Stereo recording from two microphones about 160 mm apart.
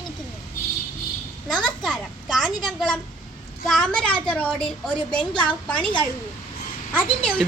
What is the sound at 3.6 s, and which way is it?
A woman's voice, 5° left (ahead or behind).